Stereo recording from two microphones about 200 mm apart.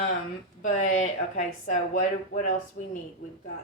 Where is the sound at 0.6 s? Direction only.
35° left (ahead or behind).